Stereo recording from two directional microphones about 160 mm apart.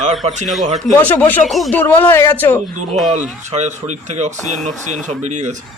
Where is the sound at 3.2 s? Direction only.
45° right (ahead or behind).